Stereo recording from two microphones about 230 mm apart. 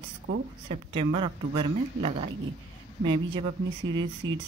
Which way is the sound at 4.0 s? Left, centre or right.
Right.